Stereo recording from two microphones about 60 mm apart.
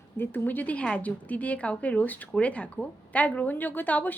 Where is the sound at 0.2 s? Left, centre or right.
Left.